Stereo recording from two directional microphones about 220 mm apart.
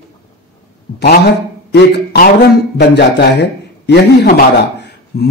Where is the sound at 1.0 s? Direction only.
45° left (ahead or behind).